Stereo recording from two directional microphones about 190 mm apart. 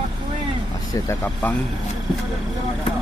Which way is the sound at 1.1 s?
10° left (ahead or behind).